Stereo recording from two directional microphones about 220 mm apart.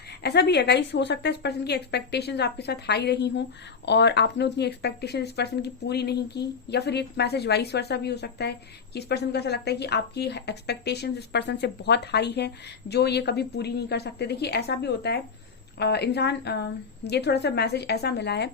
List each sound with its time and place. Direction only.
0.2 s speech: 50° left (ahead or behind)